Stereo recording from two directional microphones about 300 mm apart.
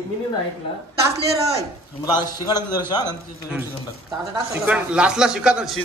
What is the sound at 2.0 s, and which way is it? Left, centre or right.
Speech, centre.